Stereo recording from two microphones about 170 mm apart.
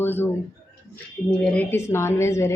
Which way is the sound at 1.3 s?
10° left (ahead or behind).